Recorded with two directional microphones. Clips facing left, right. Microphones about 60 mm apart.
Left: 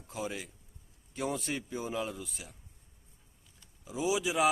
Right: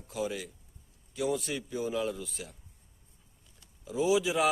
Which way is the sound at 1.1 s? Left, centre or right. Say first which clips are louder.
Right 3 dB; left.